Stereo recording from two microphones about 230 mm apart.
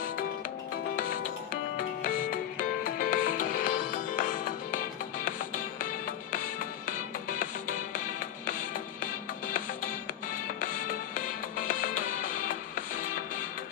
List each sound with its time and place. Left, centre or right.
2.0 s music: left
10.3 s music: left